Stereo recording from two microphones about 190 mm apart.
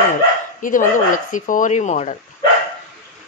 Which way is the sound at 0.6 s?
45° left (ahead or behind).